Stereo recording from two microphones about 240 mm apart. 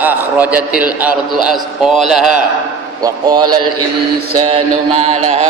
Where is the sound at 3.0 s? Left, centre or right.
Centre.